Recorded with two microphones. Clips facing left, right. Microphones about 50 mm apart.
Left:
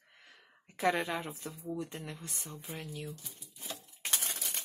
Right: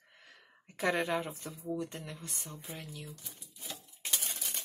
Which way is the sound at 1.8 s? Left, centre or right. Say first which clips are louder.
Right 1 dB; centre.